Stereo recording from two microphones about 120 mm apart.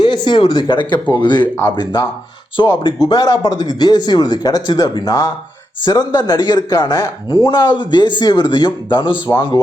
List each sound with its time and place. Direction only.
0.0 s speech: 40° left (ahead or behind)